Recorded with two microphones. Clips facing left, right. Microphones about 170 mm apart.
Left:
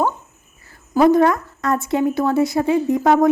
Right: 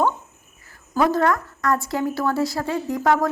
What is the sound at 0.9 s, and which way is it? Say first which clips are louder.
A woman's voice: left 6 dB; 20° left (ahead or behind).